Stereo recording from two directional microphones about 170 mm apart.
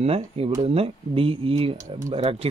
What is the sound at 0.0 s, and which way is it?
Speech, 35° right (ahead or behind).